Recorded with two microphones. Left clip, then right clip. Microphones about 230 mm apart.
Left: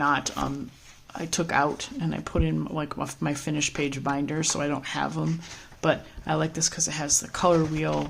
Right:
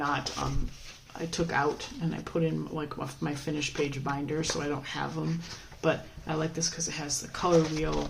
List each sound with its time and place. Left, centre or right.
0.0 s speech: left